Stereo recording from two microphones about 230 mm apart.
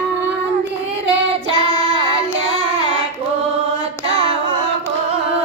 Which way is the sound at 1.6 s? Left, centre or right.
Centre.